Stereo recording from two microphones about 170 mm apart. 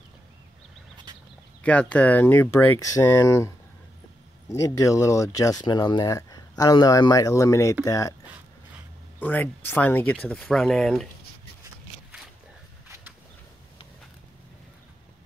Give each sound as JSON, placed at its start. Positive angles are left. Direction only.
{"t": 1.6, "sound": "speech", "side_deg": 5}
{"t": 9.2, "sound": "speech", "side_deg": 10}